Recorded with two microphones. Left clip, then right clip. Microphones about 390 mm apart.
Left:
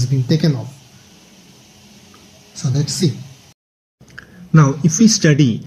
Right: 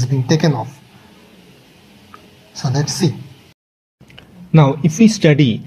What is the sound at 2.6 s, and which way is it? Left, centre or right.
Speech, right.